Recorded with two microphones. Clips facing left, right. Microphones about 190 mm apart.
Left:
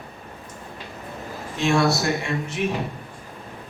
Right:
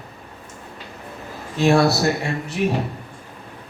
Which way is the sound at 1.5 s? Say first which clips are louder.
Right 4 dB; 35° right (ahead or behind).